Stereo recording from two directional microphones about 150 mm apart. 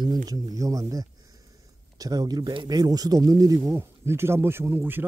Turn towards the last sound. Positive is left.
turn(degrees=-15)  # may be behind; listen again after turning